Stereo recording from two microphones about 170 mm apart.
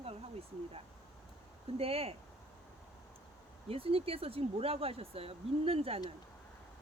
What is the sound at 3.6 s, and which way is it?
Speech, 35° right (ahead or behind).